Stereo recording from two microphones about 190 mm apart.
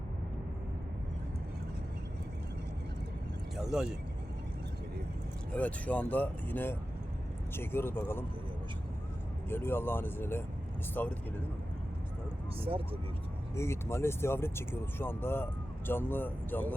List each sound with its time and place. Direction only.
3.6 s speech: centre (ahead or behind)
5.5 s speech: 5° left (ahead or behind)
9.5 s speech: 10° left (ahead or behind)
12.5 s speech: 30° right (ahead or behind)
13.6 s speech: 15° left (ahead or behind)